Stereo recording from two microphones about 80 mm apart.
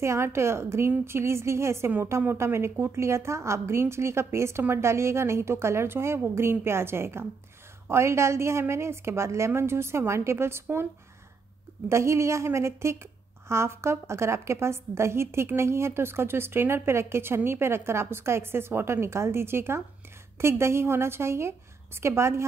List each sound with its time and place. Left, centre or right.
0.0 s a woman's voice: right
11.9 s a woman's voice: right